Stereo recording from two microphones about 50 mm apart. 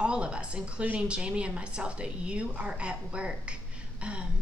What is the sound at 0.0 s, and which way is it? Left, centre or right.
A woman's voice, centre.